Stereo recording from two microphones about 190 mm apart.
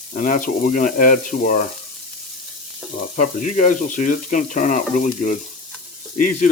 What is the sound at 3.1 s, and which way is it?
Speech, 40° left (ahead or behind).